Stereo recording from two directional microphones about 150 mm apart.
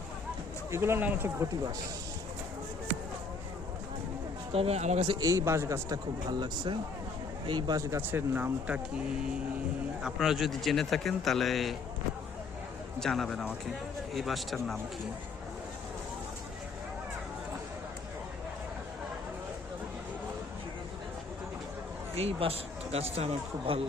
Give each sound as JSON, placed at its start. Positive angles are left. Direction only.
{"t": 0.7, "sound": "speech", "side_deg": -15}
{"t": 4.5, "sound": "speech", "side_deg": -45}
{"t": 5.2, "sound": "speech", "side_deg": -20}
{"t": 10.0, "sound": "speech", "side_deg": 0}
{"t": 13.0, "sound": "speech", "side_deg": 5}
{"t": 22.1, "sound": "speech", "side_deg": -40}